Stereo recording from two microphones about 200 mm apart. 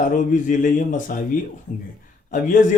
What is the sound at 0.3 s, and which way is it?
Speech, 40° left (ahead or behind).